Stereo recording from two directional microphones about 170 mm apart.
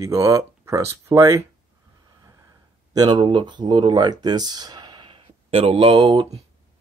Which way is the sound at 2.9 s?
25° right (ahead or behind).